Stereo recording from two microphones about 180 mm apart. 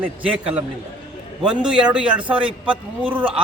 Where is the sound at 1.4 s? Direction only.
5° right (ahead or behind).